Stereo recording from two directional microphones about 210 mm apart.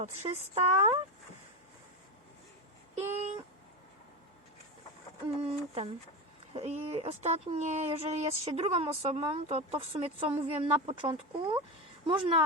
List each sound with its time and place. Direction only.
0.0 s speech: 30° right (ahead or behind)
2.9 s a sound: 35° right (ahead or behind)
5.4 s speech: 30° right (ahead or behind)